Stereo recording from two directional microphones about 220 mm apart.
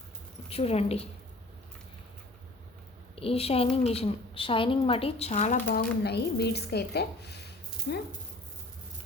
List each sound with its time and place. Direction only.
0.5 s speech: 30° left (ahead or behind)
3.2 s speech: 25° left (ahead or behind)
5.6 s speech: 45° left (ahead or behind)